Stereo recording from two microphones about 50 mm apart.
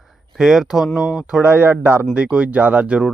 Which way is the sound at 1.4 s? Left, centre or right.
Right.